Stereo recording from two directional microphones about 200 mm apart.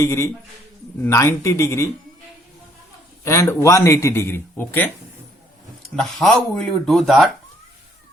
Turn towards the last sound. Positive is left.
turn(degrees=0)  # may be behind; listen again after turning